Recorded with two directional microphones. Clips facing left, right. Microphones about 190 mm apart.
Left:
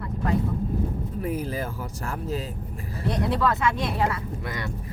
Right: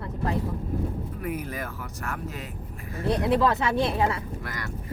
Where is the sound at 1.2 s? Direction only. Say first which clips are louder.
Left 5 dB; 30° left (ahead or behind).